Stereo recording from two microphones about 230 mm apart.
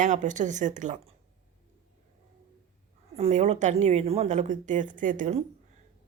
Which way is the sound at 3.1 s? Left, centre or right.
Right.